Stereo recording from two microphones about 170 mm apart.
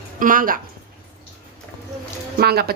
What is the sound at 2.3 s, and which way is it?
Speech, 65° right (ahead or behind).